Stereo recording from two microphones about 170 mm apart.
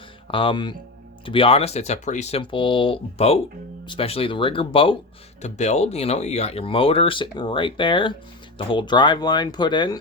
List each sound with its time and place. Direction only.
0.3 s speech: 30° left (ahead or behind)
5.4 s speech: 40° left (ahead or behind); by 10.0 s 25° left (ahead or behind)